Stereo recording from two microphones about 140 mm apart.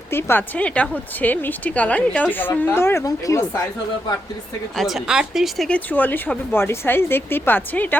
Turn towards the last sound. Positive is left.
turn(degrees=15)  # may be behind; listen again after turning